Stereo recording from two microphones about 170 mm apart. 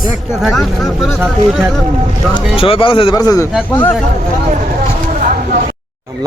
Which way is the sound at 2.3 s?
30° left (ahead or behind).